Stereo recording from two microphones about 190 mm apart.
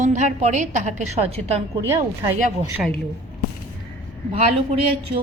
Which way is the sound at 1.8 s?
15° right (ahead or behind).